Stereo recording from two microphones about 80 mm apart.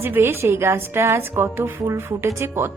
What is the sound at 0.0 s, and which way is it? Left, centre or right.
A woman's voice, right.